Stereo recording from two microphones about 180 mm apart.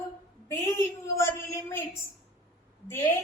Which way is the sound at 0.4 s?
15° left (ahead or behind).